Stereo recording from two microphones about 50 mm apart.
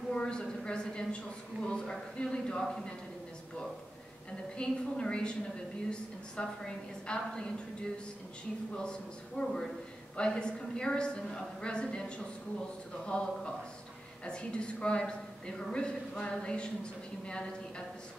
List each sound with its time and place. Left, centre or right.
0.1 s a woman's voice: centre
4.6 s a woman's voice: centre
8.7 s a woman's voice: centre